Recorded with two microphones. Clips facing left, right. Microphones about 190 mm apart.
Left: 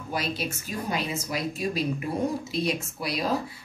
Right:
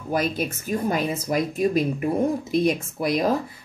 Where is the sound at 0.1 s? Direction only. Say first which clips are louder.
Right 6 dB; 50° right (ahead or behind).